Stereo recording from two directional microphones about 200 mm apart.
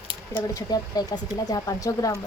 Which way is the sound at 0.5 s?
20° left (ahead or behind).